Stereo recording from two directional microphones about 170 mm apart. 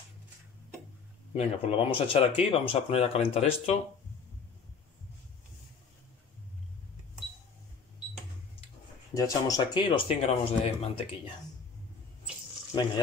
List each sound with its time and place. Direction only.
1.3 s speech: 35° left (ahead or behind)
9.1 s speech: 20° left (ahead or behind)
9.8 s speech: 30° left (ahead or behind)
12.7 s speech: 25° left (ahead or behind)